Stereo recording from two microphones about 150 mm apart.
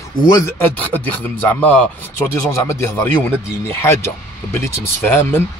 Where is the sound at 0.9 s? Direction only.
10° left (ahead or behind).